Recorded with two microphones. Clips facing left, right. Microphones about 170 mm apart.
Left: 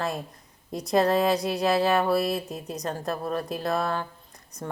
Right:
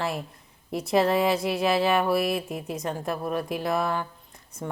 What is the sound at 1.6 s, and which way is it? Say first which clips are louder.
Speech: even; 15° right (ahead or behind).